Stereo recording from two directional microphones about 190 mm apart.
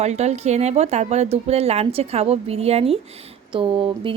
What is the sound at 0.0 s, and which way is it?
A woman's voice, 35° right (ahead or behind).